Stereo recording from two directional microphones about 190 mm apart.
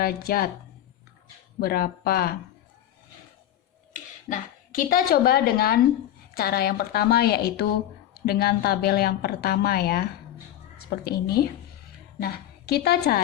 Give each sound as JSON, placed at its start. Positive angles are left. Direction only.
{"t": 0.0, "sound": "speech", "side_deg": 55}
{"t": 1.5, "sound": "speech", "side_deg": 55}
{"t": 3.9, "sound": "a woman's voice", "side_deg": 45}